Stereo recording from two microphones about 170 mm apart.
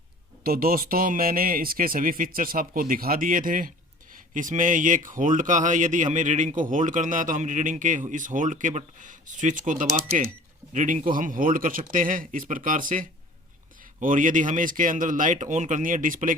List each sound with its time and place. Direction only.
0.4 s speech: 60° right (ahead or behind)